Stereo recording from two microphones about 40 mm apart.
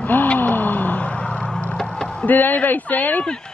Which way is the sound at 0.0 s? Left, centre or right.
Left.